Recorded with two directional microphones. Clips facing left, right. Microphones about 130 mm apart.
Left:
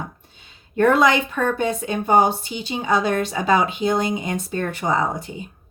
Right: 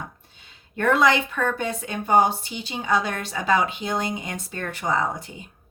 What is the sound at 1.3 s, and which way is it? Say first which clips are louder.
A woman's voice: left 4 dB; 25° left (ahead or behind).